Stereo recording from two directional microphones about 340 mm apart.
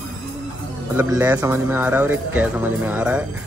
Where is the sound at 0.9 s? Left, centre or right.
Centre.